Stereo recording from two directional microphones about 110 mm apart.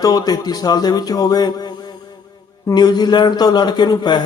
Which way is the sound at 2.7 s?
40° left (ahead or behind).